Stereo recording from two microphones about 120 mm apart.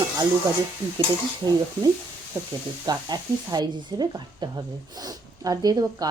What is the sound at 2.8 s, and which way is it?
Speech, 35° right (ahead or behind).